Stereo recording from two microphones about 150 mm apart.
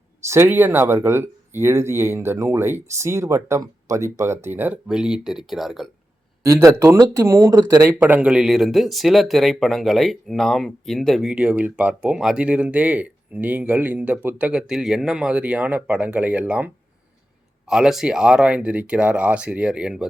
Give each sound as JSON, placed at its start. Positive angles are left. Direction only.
{"t": 0.3, "sound": "speech", "side_deg": -15}
{"t": 6.4, "sound": "speech", "side_deg": -20}